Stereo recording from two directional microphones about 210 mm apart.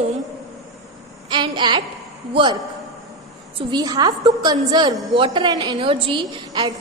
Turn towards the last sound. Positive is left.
turn(degrees=-20)  # may be behind; listen again after turning